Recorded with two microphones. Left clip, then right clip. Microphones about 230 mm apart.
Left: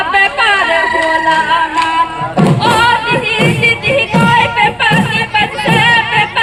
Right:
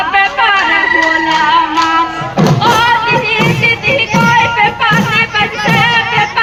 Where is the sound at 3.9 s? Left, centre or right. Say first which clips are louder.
Right 1 dB; left.